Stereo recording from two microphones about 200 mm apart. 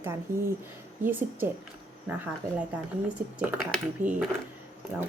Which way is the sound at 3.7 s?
5° right (ahead or behind).